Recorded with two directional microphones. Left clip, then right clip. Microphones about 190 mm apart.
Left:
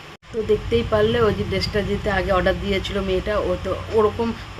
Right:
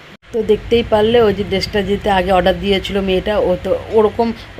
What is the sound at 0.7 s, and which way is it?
Speech, 20° right (ahead or behind).